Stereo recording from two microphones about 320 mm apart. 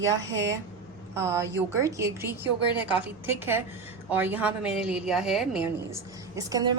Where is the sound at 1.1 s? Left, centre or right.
Centre.